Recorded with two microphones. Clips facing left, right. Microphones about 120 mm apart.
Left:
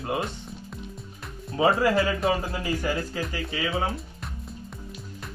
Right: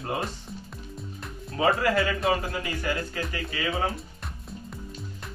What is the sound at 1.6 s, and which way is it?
Speech, 25° left (ahead or behind).